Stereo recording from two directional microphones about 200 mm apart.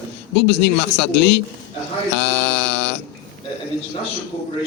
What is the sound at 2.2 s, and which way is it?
Mantra, 60° left (ahead or behind).